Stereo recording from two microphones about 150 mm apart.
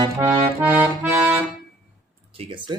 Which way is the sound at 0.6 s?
10° right (ahead or behind).